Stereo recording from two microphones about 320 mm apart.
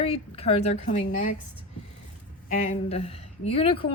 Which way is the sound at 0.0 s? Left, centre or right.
Centre.